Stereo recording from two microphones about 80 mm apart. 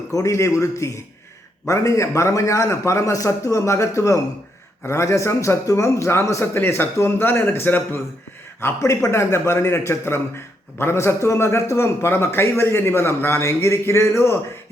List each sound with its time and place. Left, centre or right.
0.1 s a man's voice: left